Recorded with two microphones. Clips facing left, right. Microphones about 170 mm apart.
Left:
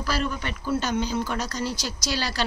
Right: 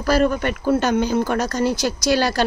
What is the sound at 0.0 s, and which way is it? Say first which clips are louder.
Speech: right 10 dB; 50° right (ahead or behind).